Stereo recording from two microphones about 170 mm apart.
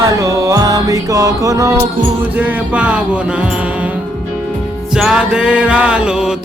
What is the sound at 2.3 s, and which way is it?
Music, 10° right (ahead or behind).